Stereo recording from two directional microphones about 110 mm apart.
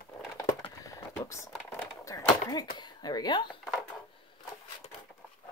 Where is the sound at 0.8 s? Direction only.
30° left (ahead or behind).